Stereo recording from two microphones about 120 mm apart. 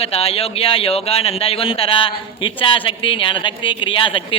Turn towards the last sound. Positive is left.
turn(degrees=45)  # may be behind; listen again after turning